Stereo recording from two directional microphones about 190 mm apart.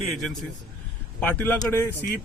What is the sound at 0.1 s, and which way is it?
Speech, centre (ahead or behind).